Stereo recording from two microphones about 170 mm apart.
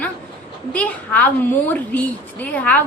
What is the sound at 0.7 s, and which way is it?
A woman's voice, 10° left (ahead or behind).